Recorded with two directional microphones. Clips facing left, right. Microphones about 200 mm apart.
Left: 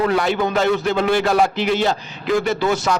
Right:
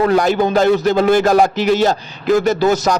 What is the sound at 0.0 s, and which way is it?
Speech, 40° right (ahead or behind).